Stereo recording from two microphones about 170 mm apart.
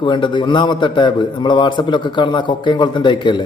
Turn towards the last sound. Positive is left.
turn(degrees=30)  # may be behind; listen again after turning